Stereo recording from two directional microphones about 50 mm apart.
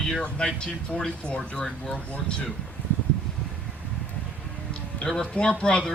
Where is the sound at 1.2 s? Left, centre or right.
Left.